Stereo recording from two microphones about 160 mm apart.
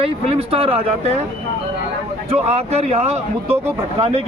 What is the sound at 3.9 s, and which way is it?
Speech, 40° right (ahead or behind).